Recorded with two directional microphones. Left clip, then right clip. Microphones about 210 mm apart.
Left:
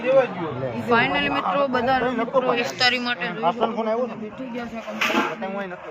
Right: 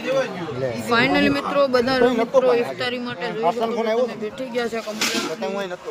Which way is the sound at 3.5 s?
65° right (ahead or behind).